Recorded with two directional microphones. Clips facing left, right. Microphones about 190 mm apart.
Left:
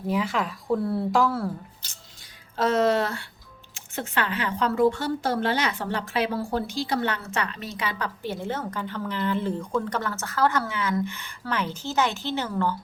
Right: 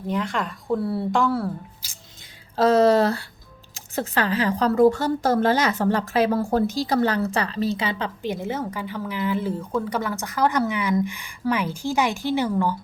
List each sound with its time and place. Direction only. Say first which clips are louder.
0.1 s speech: even; 5° left (ahead or behind)
2.6 s a woman's voice: right 5 dB; 35° right (ahead or behind); by 12.7 s 15° right (ahead or behind)